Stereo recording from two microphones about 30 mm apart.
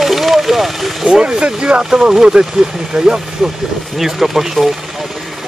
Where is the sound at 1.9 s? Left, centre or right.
Right.